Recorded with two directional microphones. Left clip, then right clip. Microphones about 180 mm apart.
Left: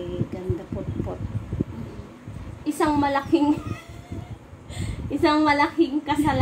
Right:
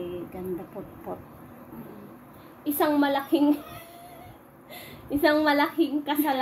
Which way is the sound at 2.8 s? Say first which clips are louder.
Left 2 dB; 25° right (ahead or behind).